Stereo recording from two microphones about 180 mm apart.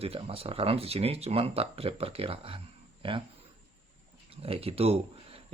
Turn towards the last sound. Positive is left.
turn(degrees=-35)  # may be behind; listen again after turning